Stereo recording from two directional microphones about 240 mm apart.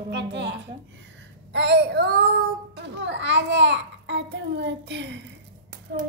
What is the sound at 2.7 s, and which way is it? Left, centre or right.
Babbling, right.